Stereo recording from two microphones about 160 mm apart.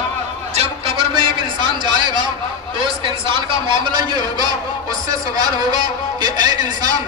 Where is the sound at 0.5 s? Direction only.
40° right (ahead or behind).